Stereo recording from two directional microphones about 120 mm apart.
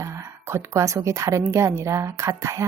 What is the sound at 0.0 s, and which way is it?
A woman's voice, 25° right (ahead or behind).